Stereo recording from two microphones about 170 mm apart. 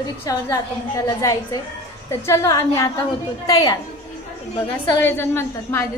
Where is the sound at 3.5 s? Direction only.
20° left (ahead or behind).